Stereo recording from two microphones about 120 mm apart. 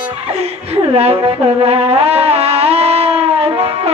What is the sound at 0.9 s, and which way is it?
Music, 55° right (ahead or behind).